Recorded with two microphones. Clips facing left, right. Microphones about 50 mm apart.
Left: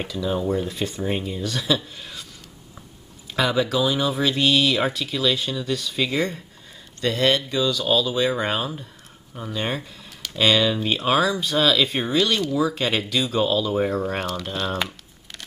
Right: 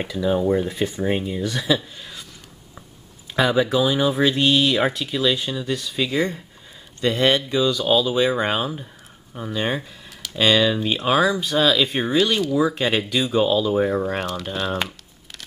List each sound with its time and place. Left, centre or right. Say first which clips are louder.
0.2 s speech: right 4 dB; right
3.3 s speech: right 3 dB; centre
12.5 s speech: right 2 dB; centre